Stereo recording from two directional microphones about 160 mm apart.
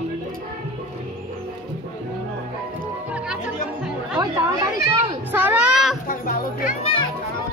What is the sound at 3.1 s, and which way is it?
Music, 5° right (ahead or behind).